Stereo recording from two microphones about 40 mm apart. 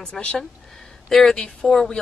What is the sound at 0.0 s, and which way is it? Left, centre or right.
Speech, left.